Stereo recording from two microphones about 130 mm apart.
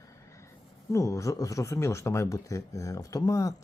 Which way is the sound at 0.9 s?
25° left (ahead or behind).